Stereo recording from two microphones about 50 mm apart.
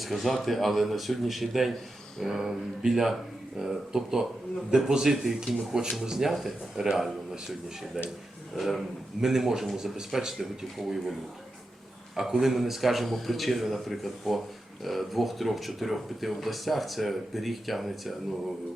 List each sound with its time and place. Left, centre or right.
0.0 s a man's voice: centre
12.1 s speech: centre